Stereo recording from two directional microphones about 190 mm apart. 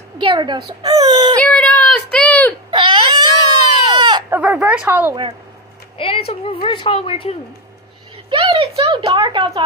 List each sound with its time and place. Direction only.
0.2 s speech: 25° right (ahead or behind)
1.4 s a sound: 5° left (ahead or behind)
2.7 s baby cry: 25° right (ahead or behind)
3.7 s goat: 25° right (ahead or behind)
4.3 s speech: 5° right (ahead or behind)
5.9 s speech: 30° left (ahead or behind)
8.3 s a sound: 30° right (ahead or behind)